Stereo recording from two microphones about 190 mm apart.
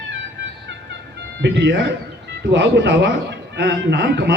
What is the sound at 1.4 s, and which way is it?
A man's voice, 65° right (ahead or behind).